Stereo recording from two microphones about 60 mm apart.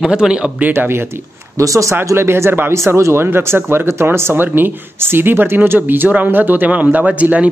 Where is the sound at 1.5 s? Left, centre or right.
Right.